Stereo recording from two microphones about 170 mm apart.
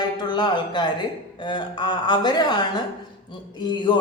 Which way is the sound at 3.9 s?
30° left (ahead or behind).